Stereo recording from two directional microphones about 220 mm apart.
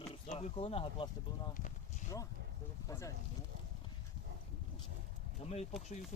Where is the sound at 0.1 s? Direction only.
25° left (ahead or behind).